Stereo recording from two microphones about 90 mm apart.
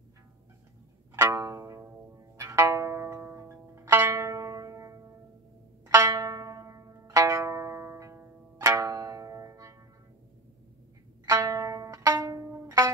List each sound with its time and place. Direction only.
1.1 s music: 40° right (ahead or behind)
11.2 s music: 40° right (ahead or behind)